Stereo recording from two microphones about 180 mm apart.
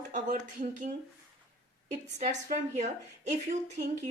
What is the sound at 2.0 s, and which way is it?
Speech, 40° right (ahead or behind).